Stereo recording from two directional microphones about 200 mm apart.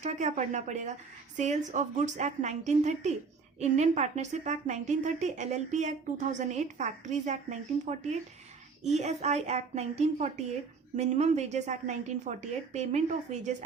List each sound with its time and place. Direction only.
0.0 s a woman's voice: 35° right (ahead or behind)